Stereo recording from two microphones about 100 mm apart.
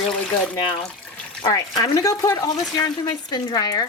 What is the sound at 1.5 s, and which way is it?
Speech, 40° left (ahead or behind).